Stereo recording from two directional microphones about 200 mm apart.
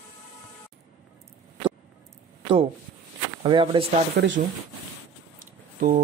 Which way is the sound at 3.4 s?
25° right (ahead or behind).